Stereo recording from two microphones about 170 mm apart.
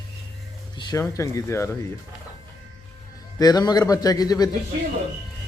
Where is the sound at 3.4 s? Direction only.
20° left (ahead or behind).